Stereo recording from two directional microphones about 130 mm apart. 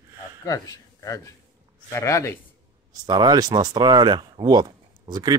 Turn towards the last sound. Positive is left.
turn(degrees=-30)  # may be behind; listen again after turning